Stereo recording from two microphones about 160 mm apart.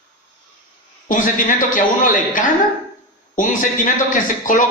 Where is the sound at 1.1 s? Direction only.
55° left (ahead or behind).